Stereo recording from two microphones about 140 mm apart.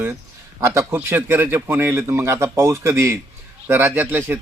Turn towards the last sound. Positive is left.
turn(degrees=-15)  # may be behind; listen again after turning